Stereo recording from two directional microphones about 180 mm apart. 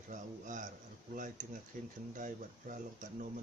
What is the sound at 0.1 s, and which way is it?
Speech, 45° right (ahead or behind).